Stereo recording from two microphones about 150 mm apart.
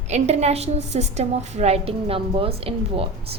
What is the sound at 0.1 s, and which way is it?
A woman's voice, 45° right (ahead or behind).